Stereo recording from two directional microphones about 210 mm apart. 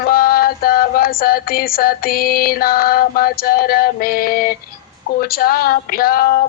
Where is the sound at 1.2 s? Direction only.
45° left (ahead or behind).